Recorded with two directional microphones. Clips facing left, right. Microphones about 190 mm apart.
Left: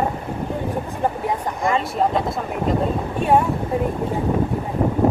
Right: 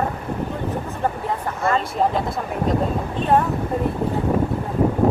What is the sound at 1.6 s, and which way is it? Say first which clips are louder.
Speech: even; 15° left (ahead or behind).